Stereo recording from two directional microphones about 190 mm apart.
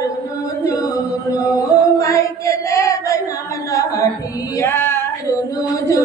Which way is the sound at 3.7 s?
15° left (ahead or behind).